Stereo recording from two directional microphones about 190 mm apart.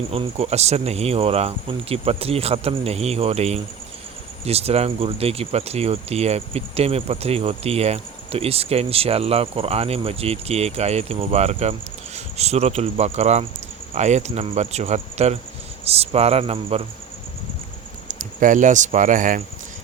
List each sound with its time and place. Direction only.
0.1 s speech: 30° right (ahead or behind)
18.1 s speech: 45° right (ahead or behind)